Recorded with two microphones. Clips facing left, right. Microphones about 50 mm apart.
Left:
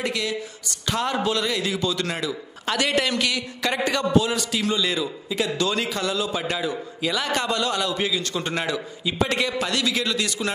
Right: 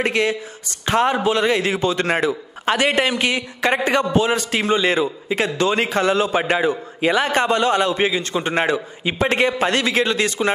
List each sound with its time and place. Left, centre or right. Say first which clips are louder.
0.0 s a man's voice: right 7 dB; right
1.4 s a man's voice: right 6 dB; right